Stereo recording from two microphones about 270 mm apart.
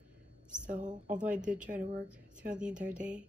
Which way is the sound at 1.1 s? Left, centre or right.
Centre.